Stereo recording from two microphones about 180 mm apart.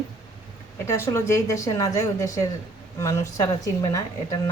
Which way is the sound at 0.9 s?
15° left (ahead or behind).